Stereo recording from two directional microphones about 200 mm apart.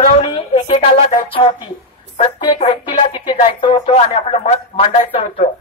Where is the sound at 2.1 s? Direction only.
30° left (ahead or behind).